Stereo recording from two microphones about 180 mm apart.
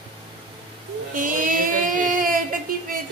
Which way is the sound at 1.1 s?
50° right (ahead or behind).